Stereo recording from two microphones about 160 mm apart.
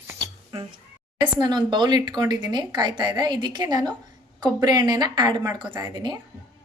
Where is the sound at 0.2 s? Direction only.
35° right (ahead or behind).